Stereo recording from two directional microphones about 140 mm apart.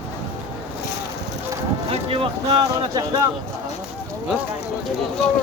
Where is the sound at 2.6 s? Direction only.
30° right (ahead or behind).